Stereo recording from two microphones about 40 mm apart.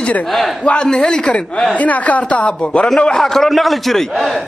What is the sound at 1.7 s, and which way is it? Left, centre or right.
Speech, left.